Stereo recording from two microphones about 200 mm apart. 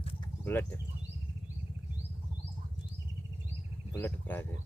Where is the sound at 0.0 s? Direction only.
30° left (ahead or behind).